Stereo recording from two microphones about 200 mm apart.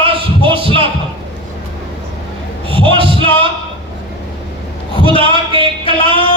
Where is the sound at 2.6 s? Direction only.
25° right (ahead or behind).